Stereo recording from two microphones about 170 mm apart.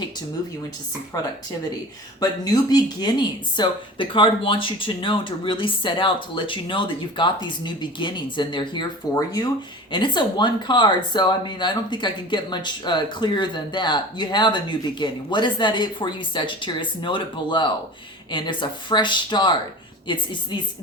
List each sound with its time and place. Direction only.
2.2 s speech: 25° left (ahead or behind)